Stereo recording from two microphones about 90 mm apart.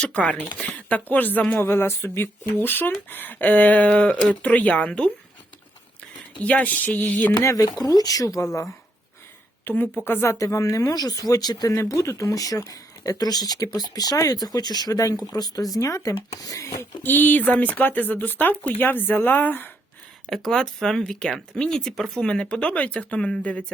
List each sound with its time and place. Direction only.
0.0 s speech: 10° left (ahead or behind)
0.6 s a sound: 15° left (ahead or behind)
1.1 s speech: 20° left (ahead or behind)
6.4 s speech: 15° left (ahead or behind)
7.3 s speech: 45° left (ahead or behind)
9.6 s speech: 20° left (ahead or behind)
10.3 s speech: 35° left (ahead or behind)
17.0 s speech: 20° left (ahead or behind)
20.3 s speech: 5° left (ahead or behind)